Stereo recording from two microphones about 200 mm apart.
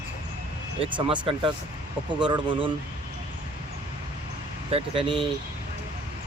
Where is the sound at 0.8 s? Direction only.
25° right (ahead or behind).